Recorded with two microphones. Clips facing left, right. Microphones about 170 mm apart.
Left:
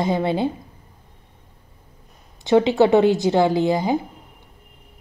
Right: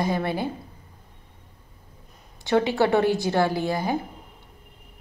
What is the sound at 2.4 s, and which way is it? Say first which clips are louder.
A woman's voice: left 6 dB; 20° left (ahead or behind).